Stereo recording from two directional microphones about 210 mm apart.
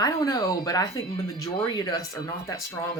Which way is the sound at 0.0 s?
15° left (ahead or behind).